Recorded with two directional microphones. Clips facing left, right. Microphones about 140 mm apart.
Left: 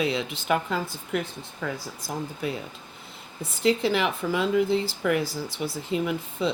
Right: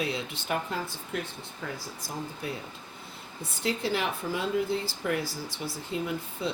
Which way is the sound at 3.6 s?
90° left.